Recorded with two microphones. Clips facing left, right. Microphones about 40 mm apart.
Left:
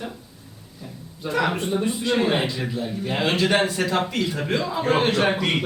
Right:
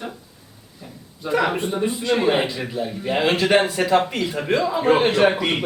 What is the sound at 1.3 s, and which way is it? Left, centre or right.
A man's voice, centre.